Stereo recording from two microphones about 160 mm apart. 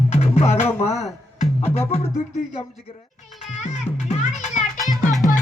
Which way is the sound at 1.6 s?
15° left (ahead or behind).